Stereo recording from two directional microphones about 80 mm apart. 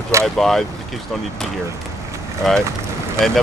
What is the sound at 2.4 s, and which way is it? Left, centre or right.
Speech, centre.